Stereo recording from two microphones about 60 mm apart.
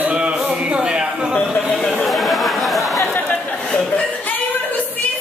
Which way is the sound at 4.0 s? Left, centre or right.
Left.